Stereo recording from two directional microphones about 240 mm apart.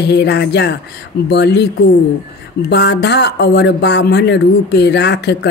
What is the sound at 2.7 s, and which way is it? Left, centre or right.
Speech, left.